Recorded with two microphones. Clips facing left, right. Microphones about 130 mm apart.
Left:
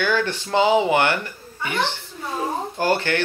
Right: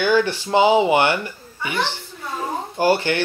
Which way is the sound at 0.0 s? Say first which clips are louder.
Right 4 dB; 15° right (ahead or behind).